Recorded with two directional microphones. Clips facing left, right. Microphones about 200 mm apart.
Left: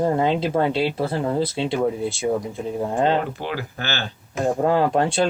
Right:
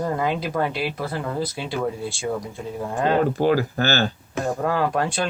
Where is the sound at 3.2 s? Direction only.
40° right (ahead or behind).